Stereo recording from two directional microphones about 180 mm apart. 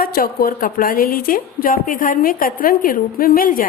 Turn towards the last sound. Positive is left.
turn(degrees=50)  # may be behind; listen again after turning